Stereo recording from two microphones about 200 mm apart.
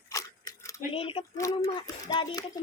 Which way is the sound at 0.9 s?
30° left (ahead or behind).